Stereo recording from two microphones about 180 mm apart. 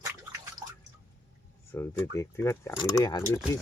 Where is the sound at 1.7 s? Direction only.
15° left (ahead or behind).